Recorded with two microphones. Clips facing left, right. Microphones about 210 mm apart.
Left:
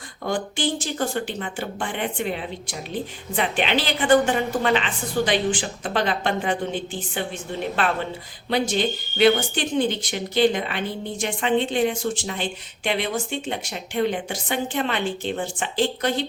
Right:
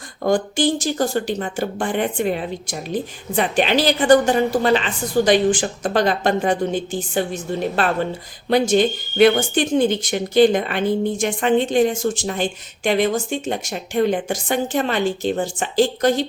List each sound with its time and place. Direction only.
0.3 s speech: 45° right (ahead or behind)
8.4 s speech: 45° right (ahead or behind)